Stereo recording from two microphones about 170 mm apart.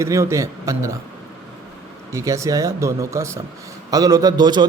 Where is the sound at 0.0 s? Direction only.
15° right (ahead or behind).